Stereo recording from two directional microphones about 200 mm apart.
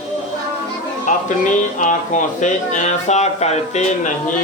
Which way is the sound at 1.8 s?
40° left (ahead or behind).